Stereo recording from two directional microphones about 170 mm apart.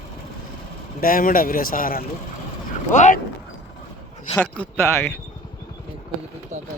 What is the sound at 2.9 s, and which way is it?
Speech, 45° left (ahead or behind).